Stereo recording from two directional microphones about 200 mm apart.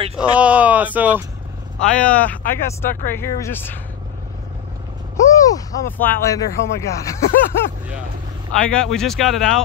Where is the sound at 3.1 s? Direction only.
10° left (ahead or behind).